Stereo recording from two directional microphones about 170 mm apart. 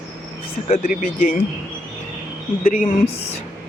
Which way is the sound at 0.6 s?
45° left (ahead or behind).